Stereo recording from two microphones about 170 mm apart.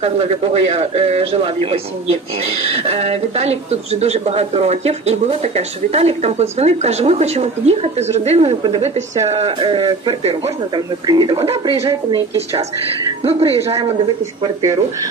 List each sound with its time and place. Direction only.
0.0 s speech: 40° right (ahead or behind)
13.2 s speech: 35° right (ahead or behind)
14.4 s speech: 20° right (ahead or behind)